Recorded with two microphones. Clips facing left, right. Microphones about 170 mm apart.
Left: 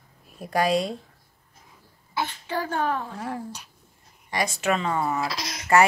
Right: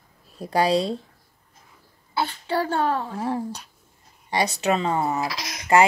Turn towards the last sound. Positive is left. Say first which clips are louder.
# right 1 dB
turn(degrees=-20)  # may be behind; listen again after turning